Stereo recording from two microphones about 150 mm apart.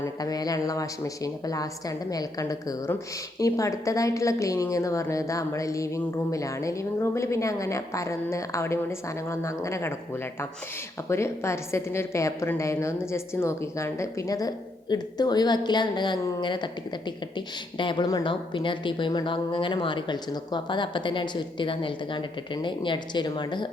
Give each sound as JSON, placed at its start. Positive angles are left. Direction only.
{"t": 0.0, "sound": "a woman's voice", "side_deg": 25}
{"t": 11.1, "sound": "a woman's voice", "side_deg": 20}